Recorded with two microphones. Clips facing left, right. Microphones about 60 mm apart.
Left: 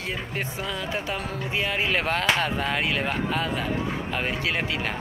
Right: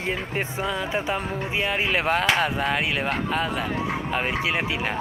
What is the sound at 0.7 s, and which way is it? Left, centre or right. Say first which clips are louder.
Speech: right 5 dB; centre.